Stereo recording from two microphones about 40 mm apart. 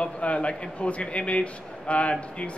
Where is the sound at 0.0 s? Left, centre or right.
Left.